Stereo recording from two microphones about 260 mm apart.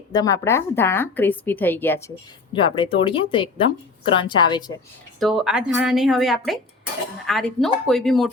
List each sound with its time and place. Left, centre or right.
0.1 s speech: centre
5.2 s speech: centre